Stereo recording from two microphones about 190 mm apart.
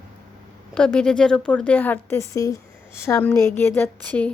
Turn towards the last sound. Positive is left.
turn(degrees=10)  # may be behind; listen again after turning